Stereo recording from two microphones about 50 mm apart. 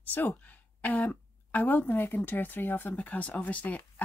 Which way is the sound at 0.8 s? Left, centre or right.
Left.